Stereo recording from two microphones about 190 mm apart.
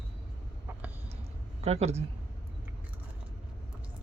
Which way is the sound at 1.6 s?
35° right (ahead or behind).